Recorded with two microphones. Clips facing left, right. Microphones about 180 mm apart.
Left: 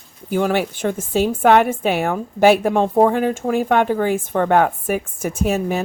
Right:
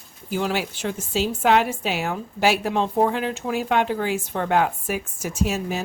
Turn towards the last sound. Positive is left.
turn(degrees=55)  # may be behind; listen again after turning